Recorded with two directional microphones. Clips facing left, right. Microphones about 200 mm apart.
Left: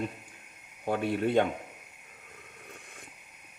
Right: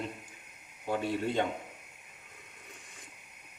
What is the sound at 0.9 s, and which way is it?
Speech, 60° left (ahead or behind).